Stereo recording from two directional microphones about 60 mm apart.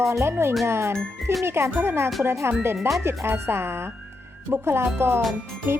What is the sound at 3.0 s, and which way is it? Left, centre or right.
Speech, right.